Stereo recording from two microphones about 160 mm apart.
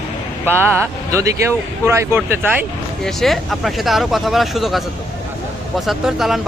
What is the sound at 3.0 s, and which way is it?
Speech, centre (ahead or behind).